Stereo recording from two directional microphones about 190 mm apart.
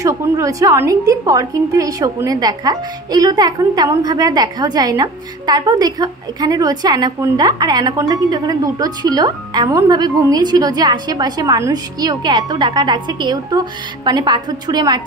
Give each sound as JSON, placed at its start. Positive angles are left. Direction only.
{"t": 0.0, "sound": "a woman's voice", "side_deg": -15}